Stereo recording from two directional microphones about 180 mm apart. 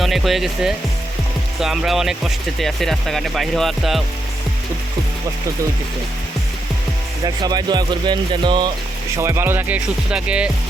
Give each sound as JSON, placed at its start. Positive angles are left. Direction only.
{"t": 0.0, "sound": "speech", "side_deg": 0}
{"t": 7.4, "sound": "speech", "side_deg": -20}
{"t": 9.1, "sound": "music", "side_deg": -15}